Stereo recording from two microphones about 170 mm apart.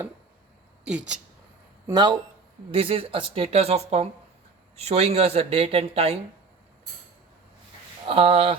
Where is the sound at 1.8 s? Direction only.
25° right (ahead or behind).